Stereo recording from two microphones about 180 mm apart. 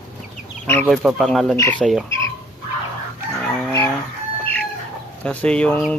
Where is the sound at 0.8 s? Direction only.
5° right (ahead or behind).